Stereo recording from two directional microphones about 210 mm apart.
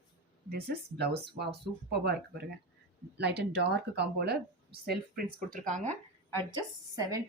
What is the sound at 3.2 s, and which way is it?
Speech, 50° right (ahead or behind).